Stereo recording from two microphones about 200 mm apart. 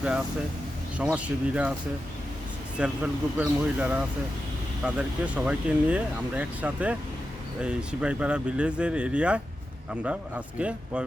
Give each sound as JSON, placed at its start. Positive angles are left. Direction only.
{"t": 0.9, "sound": "speech", "side_deg": -5}
{"t": 2.7, "sound": "speech", "side_deg": -5}